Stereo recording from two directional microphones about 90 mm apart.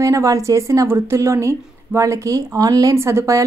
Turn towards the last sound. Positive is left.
turn(degrees=-35)  # may be behind; listen again after turning